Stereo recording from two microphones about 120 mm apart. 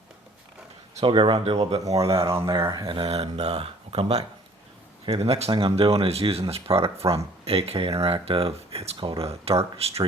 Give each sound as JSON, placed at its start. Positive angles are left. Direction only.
{"t": 1.0, "sound": "speech", "side_deg": -45}
{"t": 1.8, "sound": "speech", "side_deg": -30}
{"t": 2.7, "sound": "speech", "side_deg": -45}